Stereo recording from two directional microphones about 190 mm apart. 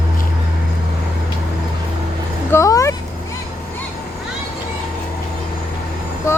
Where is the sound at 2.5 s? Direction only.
15° left (ahead or behind).